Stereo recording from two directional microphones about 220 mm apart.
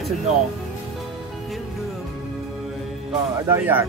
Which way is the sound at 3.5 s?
10° right (ahead or behind).